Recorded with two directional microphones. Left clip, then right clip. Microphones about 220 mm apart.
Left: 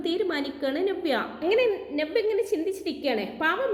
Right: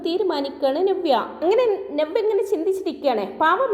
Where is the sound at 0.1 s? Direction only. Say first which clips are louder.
Right 6 dB; 10° right (ahead or behind).